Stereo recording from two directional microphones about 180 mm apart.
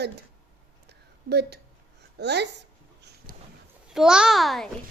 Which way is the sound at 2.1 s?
65° right (ahead or behind).